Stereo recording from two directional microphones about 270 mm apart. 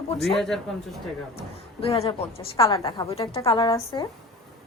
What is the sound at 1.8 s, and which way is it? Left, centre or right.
A woman's voice, left.